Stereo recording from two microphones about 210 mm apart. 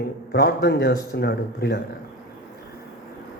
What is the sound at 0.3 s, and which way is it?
Speech, 50° left (ahead or behind).